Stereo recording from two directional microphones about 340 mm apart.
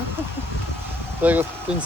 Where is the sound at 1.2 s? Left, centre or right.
Centre.